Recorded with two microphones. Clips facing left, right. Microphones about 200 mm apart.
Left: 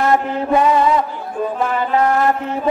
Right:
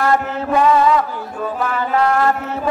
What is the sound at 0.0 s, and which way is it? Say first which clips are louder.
Music: left 1 dB; 20° left (ahead or behind).